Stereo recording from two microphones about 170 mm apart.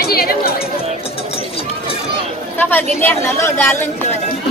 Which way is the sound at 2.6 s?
10° left (ahead or behind).